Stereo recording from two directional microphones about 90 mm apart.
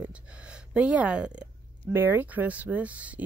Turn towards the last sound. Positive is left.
turn(degrees=-15)  # may be behind; listen again after turning